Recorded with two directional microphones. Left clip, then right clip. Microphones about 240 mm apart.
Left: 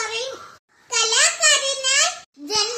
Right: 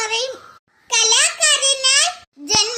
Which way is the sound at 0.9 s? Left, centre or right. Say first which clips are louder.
Right 3 dB; right.